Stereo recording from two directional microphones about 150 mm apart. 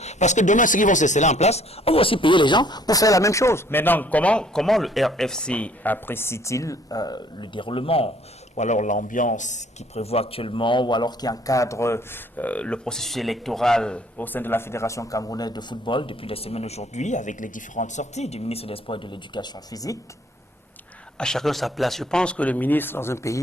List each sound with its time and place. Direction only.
0.0 s speech: 50° left (ahead or behind)
8.5 s a man's voice: 50° left (ahead or behind); by 20.0 s 25° left (ahead or behind)
21.2 s speech: 5° left (ahead or behind)